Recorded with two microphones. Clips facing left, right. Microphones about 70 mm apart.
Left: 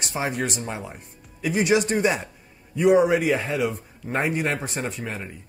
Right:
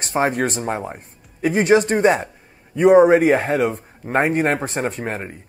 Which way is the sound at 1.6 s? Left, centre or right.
Right.